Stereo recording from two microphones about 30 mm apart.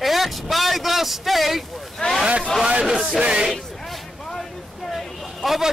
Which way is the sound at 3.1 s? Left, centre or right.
Right.